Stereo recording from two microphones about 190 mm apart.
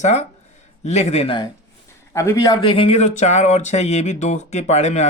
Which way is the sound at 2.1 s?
15° left (ahead or behind).